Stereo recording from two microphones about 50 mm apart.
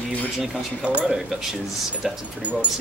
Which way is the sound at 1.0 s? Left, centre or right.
Centre.